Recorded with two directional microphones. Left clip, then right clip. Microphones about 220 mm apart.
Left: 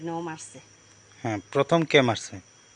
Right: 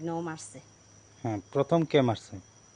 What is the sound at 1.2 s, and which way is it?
Speech, centre (ahead or behind).